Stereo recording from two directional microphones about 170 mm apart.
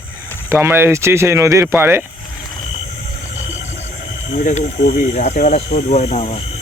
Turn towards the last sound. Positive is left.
turn(degrees=40)  # may be behind; listen again after turning